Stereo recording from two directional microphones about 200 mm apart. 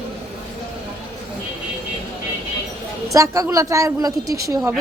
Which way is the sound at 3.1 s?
15° right (ahead or behind).